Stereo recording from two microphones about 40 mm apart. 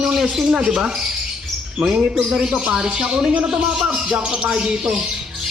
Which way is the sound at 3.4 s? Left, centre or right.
Right.